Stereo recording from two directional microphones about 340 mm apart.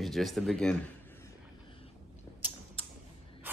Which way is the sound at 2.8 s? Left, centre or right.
Centre.